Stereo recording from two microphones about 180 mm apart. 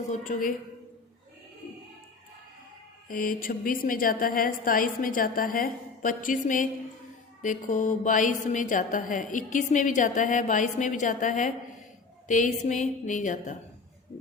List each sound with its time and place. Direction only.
0.1 s a woman's voice: 50° left (ahead or behind)
3.1 s a woman's voice: 50° left (ahead or behind)